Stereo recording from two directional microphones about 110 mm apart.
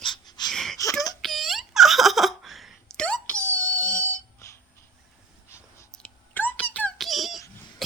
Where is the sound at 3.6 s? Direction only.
30° right (ahead or behind).